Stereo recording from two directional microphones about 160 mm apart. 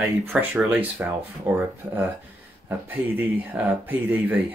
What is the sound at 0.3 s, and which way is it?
Speech, 10° right (ahead or behind).